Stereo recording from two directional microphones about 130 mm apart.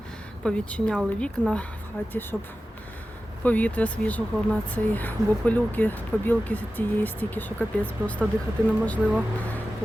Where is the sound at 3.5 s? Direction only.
10° left (ahead or behind).